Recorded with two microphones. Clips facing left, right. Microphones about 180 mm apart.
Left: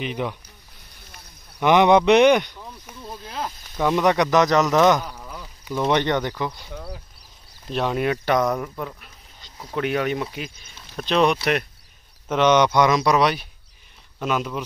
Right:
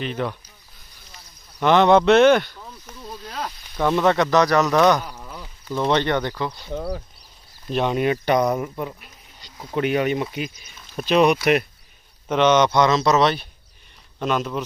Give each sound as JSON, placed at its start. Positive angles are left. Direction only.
{"t": 0.0, "sound": "speech", "side_deg": 15}
{"t": 1.6, "sound": "speech", "side_deg": 15}
{"t": 5.0, "sound": "a sound", "side_deg": -5}
{"t": 5.7, "sound": "speech", "side_deg": 10}
{"t": 6.7, "sound": "speech", "side_deg": -55}
{"t": 7.7, "sound": "speech", "side_deg": 0}
{"t": 8.6, "sound": "speech", "side_deg": -15}
{"t": 9.8, "sound": "speech", "side_deg": -5}
{"t": 12.3, "sound": "speech", "side_deg": 10}